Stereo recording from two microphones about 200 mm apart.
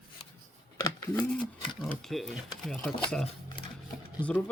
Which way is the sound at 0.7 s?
20° left (ahead or behind).